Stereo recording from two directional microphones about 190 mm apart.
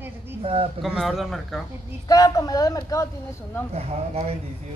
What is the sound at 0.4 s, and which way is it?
Speech, 30° right (ahead or behind).